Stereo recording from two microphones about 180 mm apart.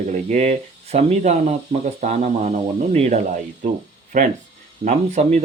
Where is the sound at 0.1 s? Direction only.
40° right (ahead or behind).